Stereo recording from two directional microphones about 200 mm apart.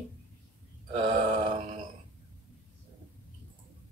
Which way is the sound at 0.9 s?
25° right (ahead or behind).